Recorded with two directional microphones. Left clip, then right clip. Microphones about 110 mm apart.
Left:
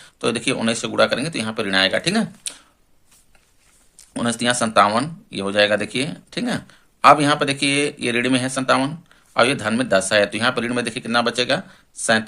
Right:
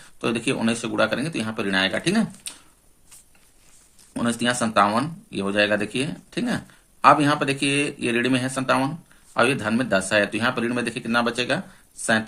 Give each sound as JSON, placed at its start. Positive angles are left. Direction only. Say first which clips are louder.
{"t": 0.0, "sound": "speech", "louder": "left 3 dB", "side_deg": 30}
{"t": 4.1, "sound": "speech", "louder": "left 3 dB", "side_deg": 30}